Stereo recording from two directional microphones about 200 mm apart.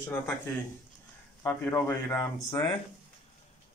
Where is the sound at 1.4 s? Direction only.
15° left (ahead or behind).